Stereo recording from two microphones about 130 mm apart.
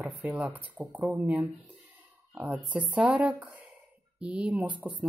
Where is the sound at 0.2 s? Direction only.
10° right (ahead or behind).